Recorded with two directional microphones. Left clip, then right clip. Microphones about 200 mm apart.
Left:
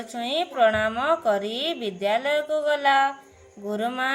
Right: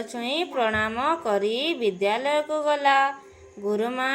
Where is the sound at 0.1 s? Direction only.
15° left (ahead or behind).